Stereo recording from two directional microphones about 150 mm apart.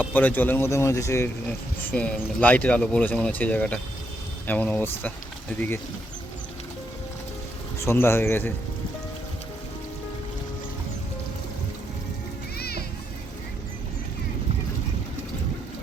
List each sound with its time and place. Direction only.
0.0 s speech: 10° left (ahead or behind)
7.8 s speech: 15° left (ahead or behind)
12.5 s music: 90° left